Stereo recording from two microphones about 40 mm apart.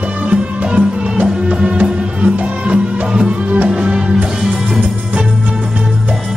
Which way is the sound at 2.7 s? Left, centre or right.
Right.